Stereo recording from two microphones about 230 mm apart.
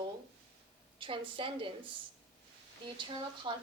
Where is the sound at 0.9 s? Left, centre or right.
Right.